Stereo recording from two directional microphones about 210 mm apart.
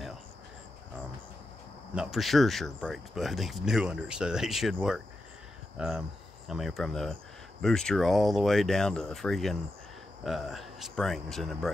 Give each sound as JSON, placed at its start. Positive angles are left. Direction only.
{"t": 2.0, "sound": "speech", "side_deg": 0}